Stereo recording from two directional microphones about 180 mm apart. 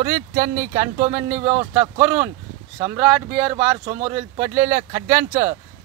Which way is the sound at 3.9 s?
35° right (ahead or behind).